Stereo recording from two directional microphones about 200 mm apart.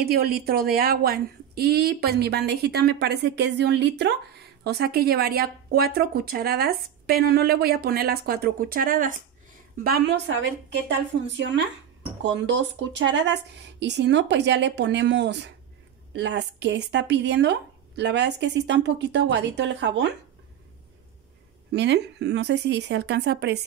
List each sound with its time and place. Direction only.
0.0 s a woman's voice: 50° right (ahead or behind)
9.8 s a woman's voice: 55° right (ahead or behind)
21.7 s speech: 60° right (ahead or behind)